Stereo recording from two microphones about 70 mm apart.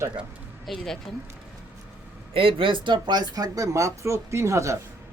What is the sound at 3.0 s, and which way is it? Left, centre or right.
Speech, right.